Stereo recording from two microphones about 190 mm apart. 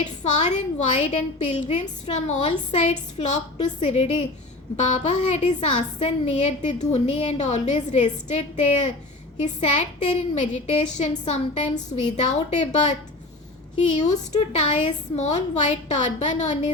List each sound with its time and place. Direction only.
0.0 s a woman's voice: 40° left (ahead or behind)